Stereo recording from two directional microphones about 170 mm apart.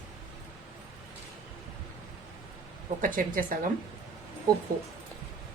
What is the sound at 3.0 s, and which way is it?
Speech, 55° right (ahead or behind).